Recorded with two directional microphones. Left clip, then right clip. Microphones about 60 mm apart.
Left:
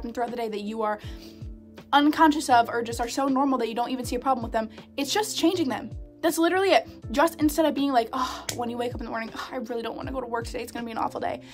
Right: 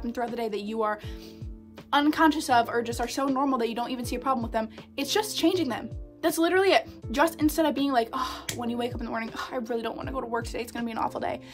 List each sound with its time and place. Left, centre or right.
0.3 s speech: left
9.2 s speech: centre